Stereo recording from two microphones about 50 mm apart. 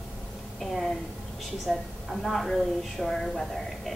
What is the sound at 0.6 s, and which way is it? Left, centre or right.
A woman's voice, centre.